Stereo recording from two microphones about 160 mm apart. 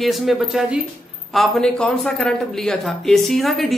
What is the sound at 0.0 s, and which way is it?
Speech, centre (ahead or behind).